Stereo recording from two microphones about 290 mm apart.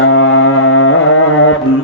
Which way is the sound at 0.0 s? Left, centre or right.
Left.